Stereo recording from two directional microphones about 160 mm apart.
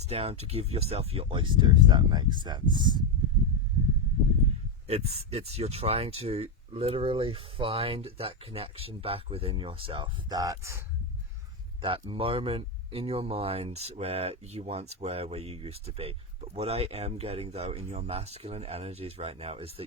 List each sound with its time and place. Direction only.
0.0 s speech: 40° right (ahead or behind)
4.9 s speech: 40° right (ahead or behind); by 10.8 s 20° right (ahead or behind)
11.8 s speech: 30° right (ahead or behind)